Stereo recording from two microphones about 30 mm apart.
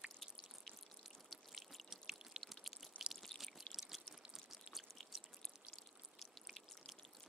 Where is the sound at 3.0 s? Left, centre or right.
Left.